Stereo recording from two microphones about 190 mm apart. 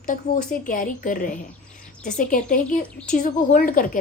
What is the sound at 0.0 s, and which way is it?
A woman's voice, 45° left (ahead or behind).